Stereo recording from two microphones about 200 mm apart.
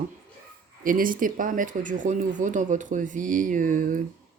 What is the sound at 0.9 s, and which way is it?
Speech, 45° right (ahead or behind).